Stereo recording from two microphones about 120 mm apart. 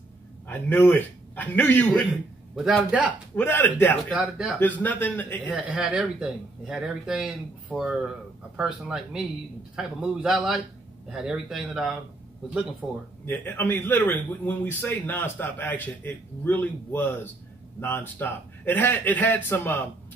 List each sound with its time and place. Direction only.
0.5 s a man's voice: 15° left (ahead or behind)
2.5 s a man's voice: 5° right (ahead or behind)
3.3 s a man's voice: 15° left (ahead or behind)
4.1 s speech: 5° right (ahead or behind)
4.6 s a man's voice: 15° left (ahead or behind)
5.4 s a man's voice: 10° right (ahead or behind)
13.3 s a man's voice: 15° left (ahead or behind)